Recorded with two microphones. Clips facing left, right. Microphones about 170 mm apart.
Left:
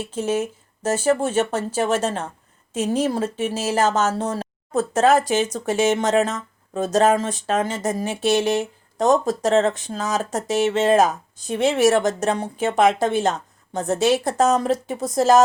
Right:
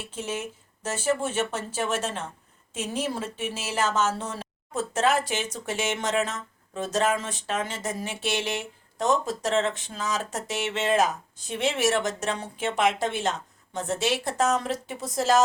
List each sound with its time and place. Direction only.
0.1 s speech: 40° left (ahead or behind)